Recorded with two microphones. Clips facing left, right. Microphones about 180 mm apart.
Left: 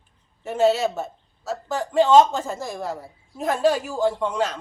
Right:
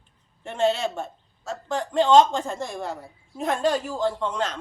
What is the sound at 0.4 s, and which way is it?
A woman's voice, 5° left (ahead or behind).